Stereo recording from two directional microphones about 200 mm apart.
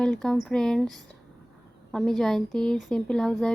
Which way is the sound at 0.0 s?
5° left (ahead or behind).